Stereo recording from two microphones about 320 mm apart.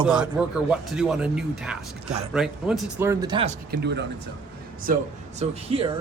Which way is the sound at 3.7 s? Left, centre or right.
Right.